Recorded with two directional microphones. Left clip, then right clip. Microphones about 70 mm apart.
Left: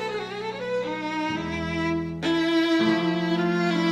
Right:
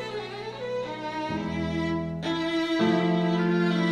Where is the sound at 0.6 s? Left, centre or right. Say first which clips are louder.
Left 3 dB; right.